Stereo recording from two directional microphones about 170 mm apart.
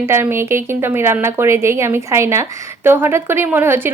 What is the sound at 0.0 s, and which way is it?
Speech, 15° right (ahead or behind).